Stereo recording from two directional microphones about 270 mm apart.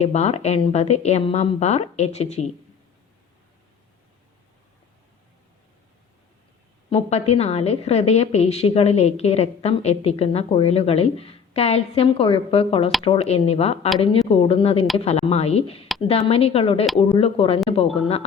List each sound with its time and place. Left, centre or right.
0.0 s a woman's voice: left
6.9 s a woman's voice: left